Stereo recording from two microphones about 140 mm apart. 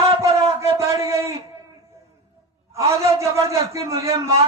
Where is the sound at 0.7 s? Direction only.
20° right (ahead or behind).